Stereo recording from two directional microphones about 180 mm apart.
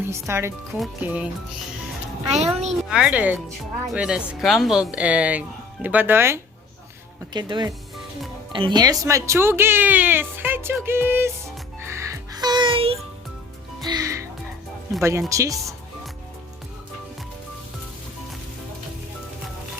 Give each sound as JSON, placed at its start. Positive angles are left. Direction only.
{"t": 0.1, "sound": "speech", "side_deg": -15}
{"t": 2.4, "sound": "a child's voice", "side_deg": -40}
{"t": 2.9, "sound": "speech", "side_deg": -5}
{"t": 7.3, "sound": "speech", "side_deg": -25}
{"t": 11.8, "sound": "music", "side_deg": -15}
{"t": 13.8, "sound": "music", "side_deg": -20}
{"t": 15.3, "sound": "speech", "side_deg": -15}